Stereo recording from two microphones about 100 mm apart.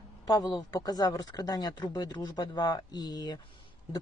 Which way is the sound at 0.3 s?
45° left (ahead or behind).